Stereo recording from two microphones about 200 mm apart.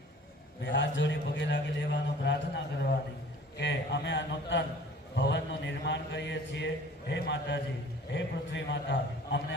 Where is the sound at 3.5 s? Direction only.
60° left (ahead or behind).